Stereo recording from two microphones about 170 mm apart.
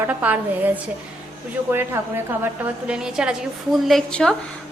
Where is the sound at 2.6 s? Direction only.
5° right (ahead or behind).